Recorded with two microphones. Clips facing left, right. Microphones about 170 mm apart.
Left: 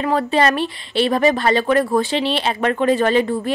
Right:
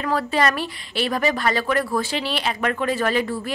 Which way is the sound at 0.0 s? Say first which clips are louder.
Left 4 dB; 25° left (ahead or behind).